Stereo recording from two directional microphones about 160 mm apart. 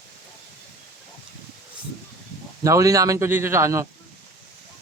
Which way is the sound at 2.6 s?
20° right (ahead or behind).